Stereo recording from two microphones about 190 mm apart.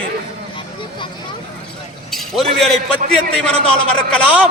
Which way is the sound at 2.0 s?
Centre (ahead or behind).